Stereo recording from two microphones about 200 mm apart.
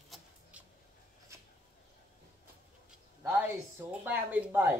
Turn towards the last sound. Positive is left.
turn(degrees=-10)  # may be behind; listen again after turning